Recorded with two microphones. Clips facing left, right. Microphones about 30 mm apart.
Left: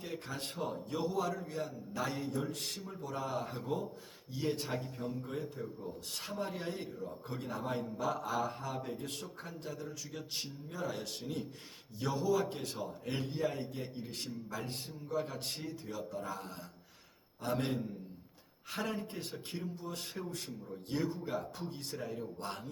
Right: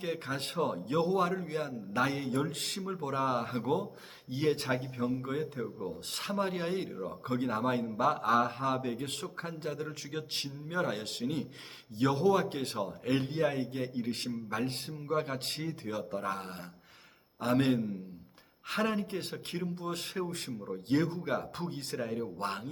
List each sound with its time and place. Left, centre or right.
0.0 s a man's voice: right
6.8 s a man's voice: right
21.9 s speech: right